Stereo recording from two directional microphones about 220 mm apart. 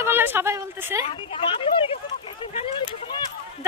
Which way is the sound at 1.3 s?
25° left (ahead or behind).